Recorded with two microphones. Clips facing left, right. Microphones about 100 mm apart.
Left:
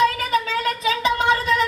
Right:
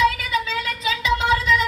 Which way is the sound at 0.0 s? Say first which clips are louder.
Left 1 dB; 45° left (ahead or behind).